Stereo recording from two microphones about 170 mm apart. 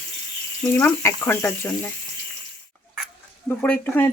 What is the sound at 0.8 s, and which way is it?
Speech, 15° left (ahead or behind).